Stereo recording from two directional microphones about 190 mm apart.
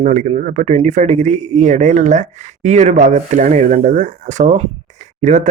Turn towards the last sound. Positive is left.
turn(degrees=-40)  # may be behind; listen again after turning